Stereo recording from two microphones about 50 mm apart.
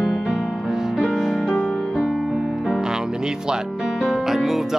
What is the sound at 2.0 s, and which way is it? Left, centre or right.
Music, centre.